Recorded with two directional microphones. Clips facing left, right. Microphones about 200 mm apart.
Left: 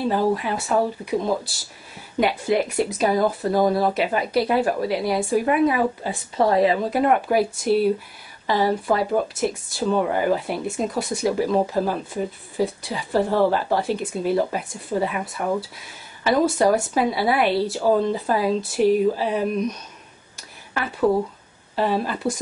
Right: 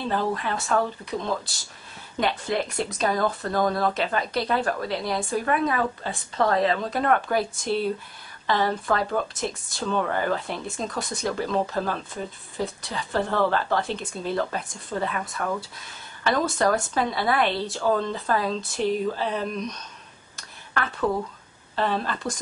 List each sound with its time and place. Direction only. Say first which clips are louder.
0.0 s speech: left 5 dB; 10° left (ahead or behind)
20.3 s a sound: left 1 dB; 10° left (ahead or behind)
21.7 s speech: left 4 dB; 10° left (ahead or behind)